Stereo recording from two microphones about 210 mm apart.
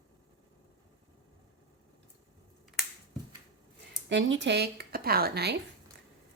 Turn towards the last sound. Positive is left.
turn(degrees=-50)  # may be behind; listen again after turning